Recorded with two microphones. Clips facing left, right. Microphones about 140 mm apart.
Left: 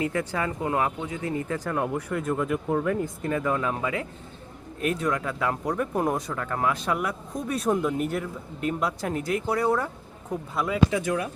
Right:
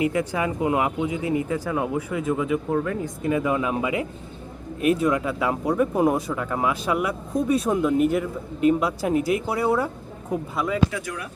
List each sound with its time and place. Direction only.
0.0 s speech: 15° right (ahead or behind); by 3.3 s centre (ahead or behind)
3.3 s speech: 10° right (ahead or behind)
10.9 s speech: 25° left (ahead or behind)